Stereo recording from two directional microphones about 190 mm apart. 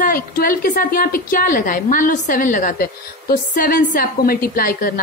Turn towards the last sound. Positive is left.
turn(degrees=50)  # may be behind; listen again after turning